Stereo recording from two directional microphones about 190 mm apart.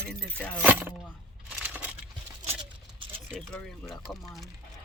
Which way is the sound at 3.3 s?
5° left (ahead or behind).